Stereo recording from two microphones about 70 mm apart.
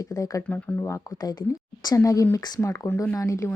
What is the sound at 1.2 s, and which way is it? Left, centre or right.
Speech, left.